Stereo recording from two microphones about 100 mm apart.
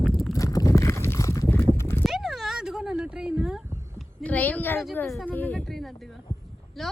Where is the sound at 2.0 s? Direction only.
Centre (ahead or behind).